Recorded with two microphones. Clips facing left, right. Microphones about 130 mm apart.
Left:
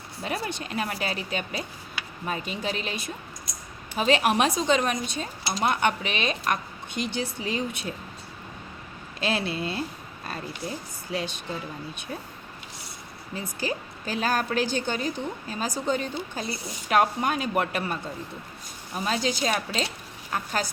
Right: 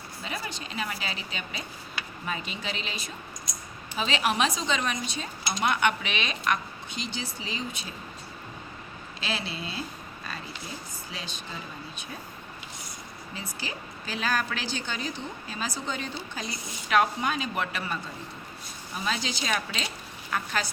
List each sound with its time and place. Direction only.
0.2 s a woman's voice: 55° left (ahead or behind)
5.5 s speech: 35° left (ahead or behind); by 7.9 s 60° left (ahead or behind)
9.2 s speech: 55° left (ahead or behind)
13.3 s a woman's voice: 50° left (ahead or behind)
18.9 s a woman's voice: 45° left (ahead or behind)
19.5 s a woman's voice: 35° left (ahead or behind)